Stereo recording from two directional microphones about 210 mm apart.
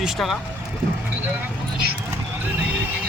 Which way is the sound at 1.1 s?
10° right (ahead or behind).